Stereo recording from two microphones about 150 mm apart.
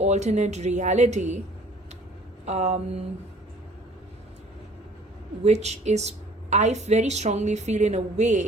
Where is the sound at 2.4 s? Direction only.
50° right (ahead or behind).